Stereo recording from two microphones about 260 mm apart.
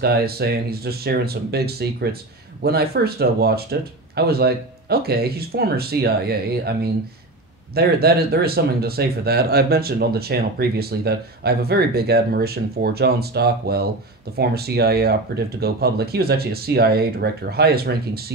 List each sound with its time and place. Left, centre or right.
0.0 s speech: right